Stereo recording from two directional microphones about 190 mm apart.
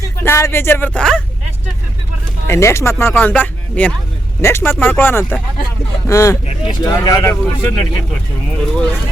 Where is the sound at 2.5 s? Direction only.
15° left (ahead or behind).